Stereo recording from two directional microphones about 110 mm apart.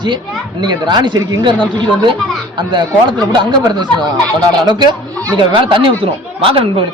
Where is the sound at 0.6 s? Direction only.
40° right (ahead or behind).